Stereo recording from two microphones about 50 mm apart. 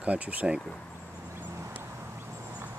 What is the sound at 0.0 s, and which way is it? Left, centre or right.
Speech, right.